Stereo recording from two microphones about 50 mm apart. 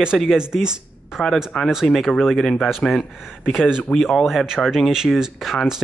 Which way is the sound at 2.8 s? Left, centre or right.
Left.